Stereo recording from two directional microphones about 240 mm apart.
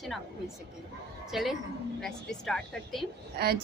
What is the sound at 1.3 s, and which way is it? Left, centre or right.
A woman's voice, centre.